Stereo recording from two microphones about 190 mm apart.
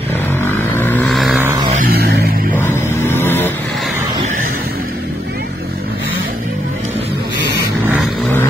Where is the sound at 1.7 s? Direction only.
55° right (ahead or behind).